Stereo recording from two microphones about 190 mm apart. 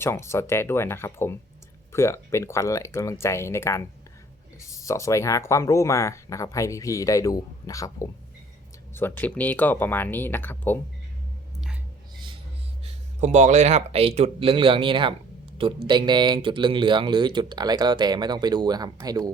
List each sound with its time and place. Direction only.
0.0 s speech: 15° left (ahead or behind)
12.8 s speech: 40° right (ahead or behind); by 19.3 s 20° right (ahead or behind)